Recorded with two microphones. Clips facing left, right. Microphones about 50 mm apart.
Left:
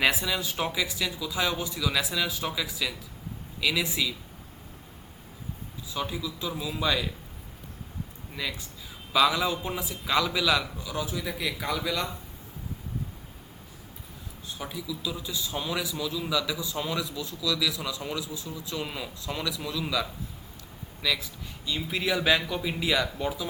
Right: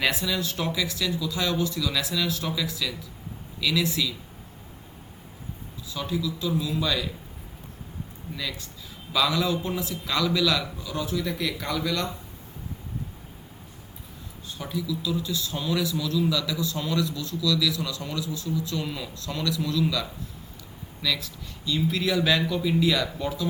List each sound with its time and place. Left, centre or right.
0.0 s a man's voice: centre
5.9 s speech: centre
8.4 s a man's voice: centre
14.4 s a man's voice: centre